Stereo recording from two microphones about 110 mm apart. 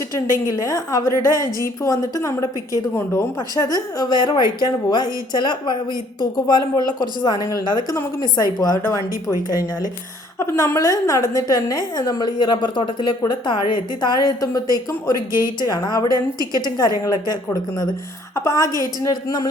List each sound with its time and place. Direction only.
0.1 s a woman's voice: 30° left (ahead or behind)
3.5 s a woman's voice: 35° left (ahead or behind)
8.8 s a woman's voice: 30° left (ahead or behind)
10.4 s a woman's voice: 25° left (ahead or behind)
16.1 s a woman's voice: 35° right (ahead or behind)
16.6 s a woman's voice: 40° left (ahead or behind)